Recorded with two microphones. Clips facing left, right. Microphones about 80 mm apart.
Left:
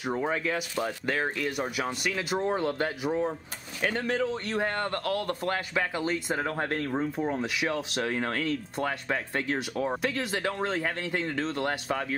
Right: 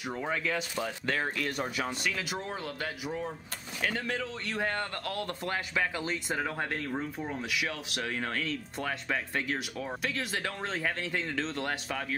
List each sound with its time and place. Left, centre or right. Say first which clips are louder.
0.2 s speech: left 3 dB; centre
1.9 s speech: left 4 dB; left
2.5 s speech: left 8 dB; left
5.3 s speech: left 4 dB; left